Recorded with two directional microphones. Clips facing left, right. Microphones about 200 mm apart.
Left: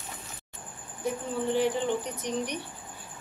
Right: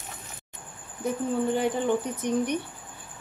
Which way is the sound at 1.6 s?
50° right (ahead or behind).